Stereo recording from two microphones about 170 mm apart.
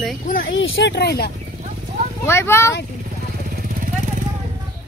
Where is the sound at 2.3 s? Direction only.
15° left (ahead or behind).